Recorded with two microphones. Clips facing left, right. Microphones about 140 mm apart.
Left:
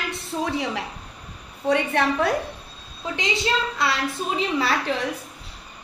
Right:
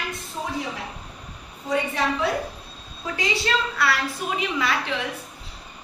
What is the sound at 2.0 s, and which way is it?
Speech, 60° left (ahead or behind).